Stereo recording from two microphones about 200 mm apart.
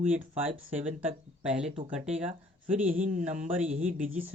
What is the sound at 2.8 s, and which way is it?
Speech, 40° right (ahead or behind).